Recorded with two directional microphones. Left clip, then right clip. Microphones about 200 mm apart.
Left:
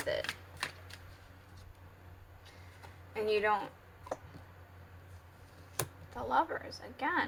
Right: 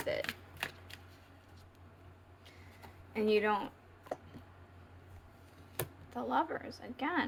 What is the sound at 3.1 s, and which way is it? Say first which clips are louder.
Speech: even; 40° right (ahead or behind).